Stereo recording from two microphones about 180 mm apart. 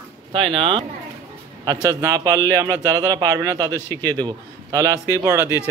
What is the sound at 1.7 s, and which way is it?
Speech, 20° right (ahead or behind).